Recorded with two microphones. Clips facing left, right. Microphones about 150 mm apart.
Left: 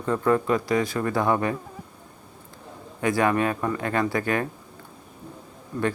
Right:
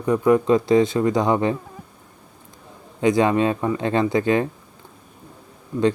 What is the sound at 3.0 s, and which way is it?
Speech, 20° right (ahead or behind).